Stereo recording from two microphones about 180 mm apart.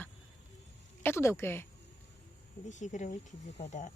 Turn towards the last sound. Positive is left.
turn(degrees=40)  # may be behind; listen again after turning